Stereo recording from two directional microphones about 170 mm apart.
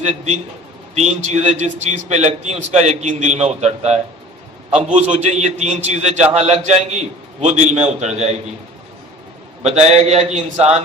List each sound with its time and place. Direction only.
0.0 s a man's voice: 40° right (ahead or behind)
9.6 s a man's voice: 40° right (ahead or behind)